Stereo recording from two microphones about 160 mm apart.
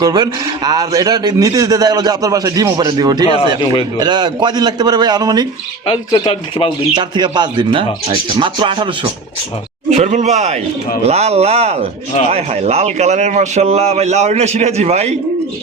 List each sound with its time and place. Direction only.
0.0 s a man's voice: 25° right (ahead or behind)
5.8 s speech: 35° left (ahead or behind)
6.9 s a man's voice: 30° right (ahead or behind)
9.9 s a man's voice: 50° right (ahead or behind)